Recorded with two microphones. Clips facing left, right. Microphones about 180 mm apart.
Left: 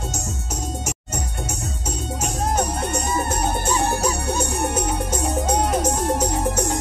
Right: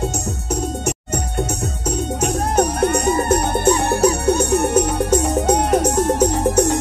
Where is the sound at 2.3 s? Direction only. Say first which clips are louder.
Right 4 dB; 60° right (ahead or behind).